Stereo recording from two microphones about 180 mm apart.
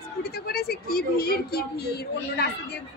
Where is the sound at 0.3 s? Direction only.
60° left (ahead or behind).